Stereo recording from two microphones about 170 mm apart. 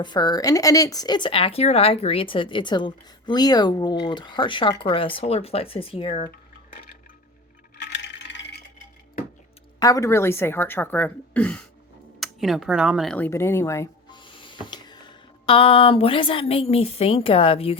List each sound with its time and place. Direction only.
0.0 s speech: 25° left (ahead or behind)
6.3 s dishes: 60° left (ahead or behind)
7.8 s coin: 85° left
9.8 s speech: 20° left (ahead or behind); by 13.1 s 5° right (ahead or behind)
13.1 s speech: 15° left (ahead or behind)
14.2 s speech: 30° left (ahead or behind)